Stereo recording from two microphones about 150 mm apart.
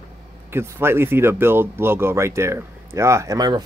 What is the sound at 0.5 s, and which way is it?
Speech, 15° right (ahead or behind).